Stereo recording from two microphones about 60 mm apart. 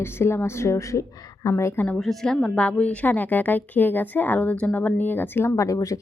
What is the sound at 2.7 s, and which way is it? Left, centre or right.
A woman's voice, left.